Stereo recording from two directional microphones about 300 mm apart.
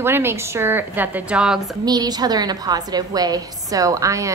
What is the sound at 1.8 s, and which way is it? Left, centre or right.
A woman's voice, centre.